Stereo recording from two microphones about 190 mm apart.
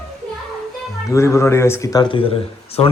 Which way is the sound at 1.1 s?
15° left (ahead or behind).